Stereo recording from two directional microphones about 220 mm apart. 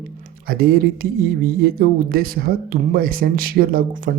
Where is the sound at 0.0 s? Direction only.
40° right (ahead or behind).